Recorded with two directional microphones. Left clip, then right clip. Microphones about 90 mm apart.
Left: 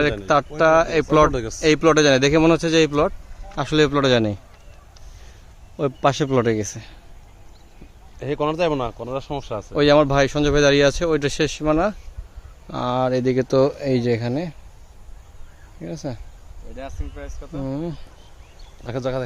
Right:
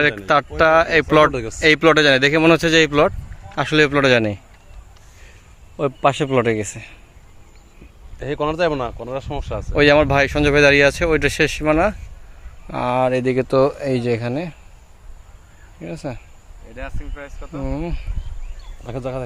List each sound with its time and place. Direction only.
0.0 s a man's voice: 10° right (ahead or behind)
2.5 s speech: 25° right (ahead or behind)
3.5 s a man's voice: 10° left (ahead or behind)
5.7 s a man's voice: 50° left (ahead or behind)
8.2 s speech: centre (ahead or behind)
9.7 s speech: centre (ahead or behind)
12.6 s speech: 15° left (ahead or behind); by 14.5 s 35° left (ahead or behind)
15.9 s speech: 25° left (ahead or behind)
16.7 s speech: 5° right (ahead or behind)
17.7 s speech: 25° left (ahead or behind)